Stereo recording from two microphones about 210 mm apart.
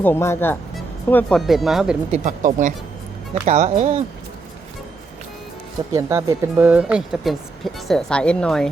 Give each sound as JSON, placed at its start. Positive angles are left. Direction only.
{"t": 0.0, "sound": "speech", "side_deg": 10}
{"t": 2.1, "sound": "speech", "side_deg": -35}
{"t": 5.9, "sound": "speech", "side_deg": -15}